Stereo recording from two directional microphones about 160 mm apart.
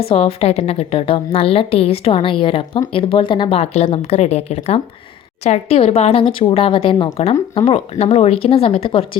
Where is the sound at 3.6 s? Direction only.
45° left (ahead or behind).